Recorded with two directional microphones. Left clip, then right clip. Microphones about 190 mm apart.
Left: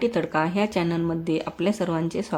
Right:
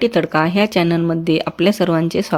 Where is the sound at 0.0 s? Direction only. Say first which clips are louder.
Right 8 dB; 30° right (ahead or behind).